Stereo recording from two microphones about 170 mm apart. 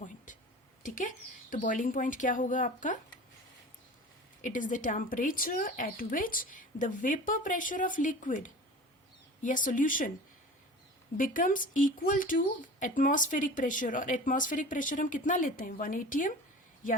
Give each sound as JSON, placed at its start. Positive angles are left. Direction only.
{"t": 0.3, "sound": "a sound", "side_deg": 50}
{"t": 0.8, "sound": "speech", "side_deg": 50}
{"t": 4.4, "sound": "speech", "side_deg": 50}
{"t": 11.2, "sound": "speech", "side_deg": 55}